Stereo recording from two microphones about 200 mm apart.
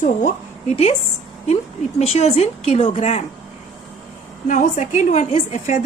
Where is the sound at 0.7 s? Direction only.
35° left (ahead or behind).